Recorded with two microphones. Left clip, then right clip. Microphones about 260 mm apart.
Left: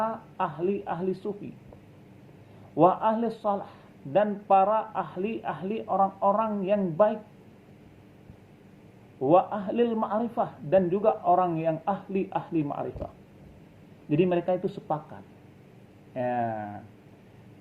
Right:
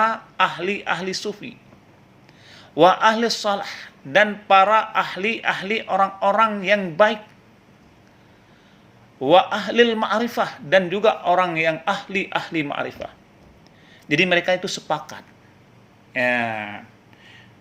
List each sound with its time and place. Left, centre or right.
0.0 s a sound: right
2.7 s a man's voice: right
9.2 s a man's voice: right
14.1 s a man's voice: right